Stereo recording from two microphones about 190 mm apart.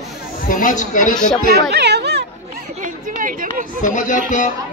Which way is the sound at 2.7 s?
45° right (ahead or behind).